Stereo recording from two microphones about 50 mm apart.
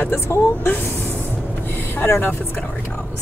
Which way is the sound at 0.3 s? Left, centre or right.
Left.